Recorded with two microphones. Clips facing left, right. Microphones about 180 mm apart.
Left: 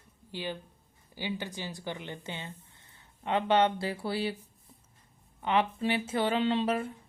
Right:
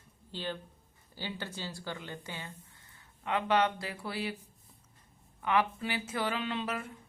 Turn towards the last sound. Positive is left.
turn(degrees=30)  # may be behind; listen again after turning